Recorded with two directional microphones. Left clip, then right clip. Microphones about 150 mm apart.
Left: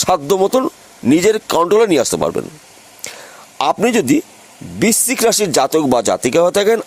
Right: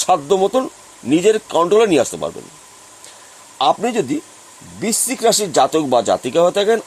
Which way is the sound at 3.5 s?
45° left (ahead or behind).